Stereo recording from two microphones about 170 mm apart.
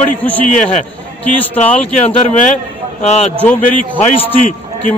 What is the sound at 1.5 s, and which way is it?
Speech, 10° left (ahead or behind).